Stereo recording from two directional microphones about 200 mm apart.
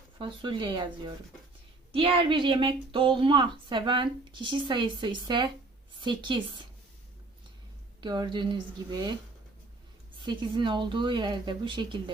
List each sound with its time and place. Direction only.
0.2 s speech: 25° right (ahead or behind)
8.0 s speech: 20° right (ahead or behind)
10.2 s speech: 25° right (ahead or behind)